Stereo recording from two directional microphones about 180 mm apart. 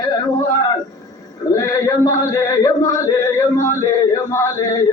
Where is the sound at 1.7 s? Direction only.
15° left (ahead or behind).